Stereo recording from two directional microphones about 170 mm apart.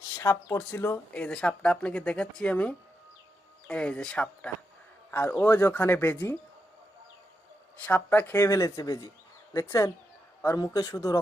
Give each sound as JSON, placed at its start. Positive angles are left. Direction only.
{"t": 0.2, "sound": "speech", "side_deg": 15}
{"t": 7.9, "sound": "speech", "side_deg": 10}